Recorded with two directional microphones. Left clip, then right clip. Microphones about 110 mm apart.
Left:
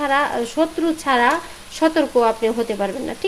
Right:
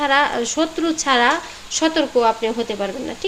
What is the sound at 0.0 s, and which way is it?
Speech, centre (ahead or behind).